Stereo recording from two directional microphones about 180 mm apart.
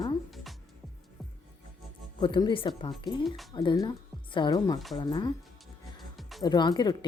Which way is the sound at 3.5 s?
25° left (ahead or behind).